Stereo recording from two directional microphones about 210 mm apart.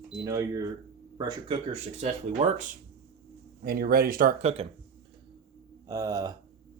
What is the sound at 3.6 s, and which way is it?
Speech, 45° right (ahead or behind).